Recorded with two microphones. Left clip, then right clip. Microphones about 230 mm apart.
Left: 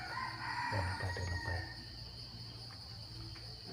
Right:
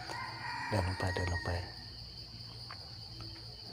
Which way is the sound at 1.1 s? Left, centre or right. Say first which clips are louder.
Right 5 dB; right.